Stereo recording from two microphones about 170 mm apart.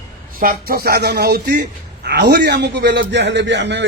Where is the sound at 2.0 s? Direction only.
70° right (ahead or behind); by 3.8 s 90° right.